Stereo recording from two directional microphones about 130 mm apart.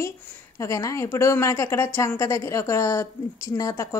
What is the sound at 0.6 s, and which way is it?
A woman's voice, 25° left (ahead or behind).